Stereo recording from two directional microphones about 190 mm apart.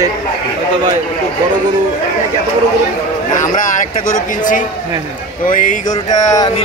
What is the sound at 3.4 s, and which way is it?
Speech, 40° left (ahead or behind).